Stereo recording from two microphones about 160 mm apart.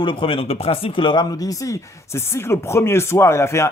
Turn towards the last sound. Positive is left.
turn(degrees=15)  # may be behind; listen again after turning